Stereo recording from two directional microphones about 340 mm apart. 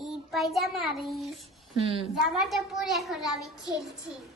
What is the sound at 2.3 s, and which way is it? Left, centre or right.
A child's voice, centre.